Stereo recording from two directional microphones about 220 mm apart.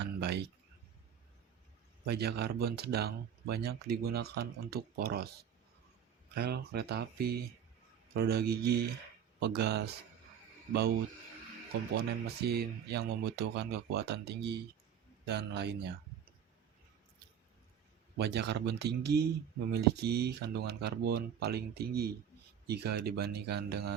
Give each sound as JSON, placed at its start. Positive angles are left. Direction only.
{"t": 0.0, "sound": "a sound", "side_deg": -50}
{"t": 2.0, "sound": "speech", "side_deg": -45}
{"t": 6.3, "sound": "speech", "side_deg": -45}
{"t": 12.4, "sound": "speech", "side_deg": -45}
{"t": 18.2, "sound": "speech", "side_deg": -50}